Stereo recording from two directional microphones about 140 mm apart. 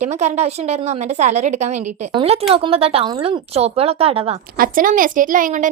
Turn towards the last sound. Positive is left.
turn(degrees=-70)  # may be behind; listen again after turning